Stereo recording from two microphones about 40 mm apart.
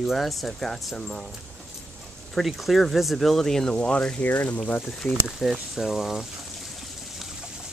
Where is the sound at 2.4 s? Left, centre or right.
Centre.